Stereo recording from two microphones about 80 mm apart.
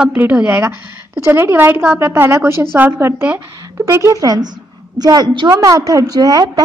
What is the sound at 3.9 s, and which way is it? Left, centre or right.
A woman's voice, right.